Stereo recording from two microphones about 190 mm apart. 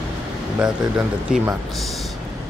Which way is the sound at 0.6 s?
5° right (ahead or behind).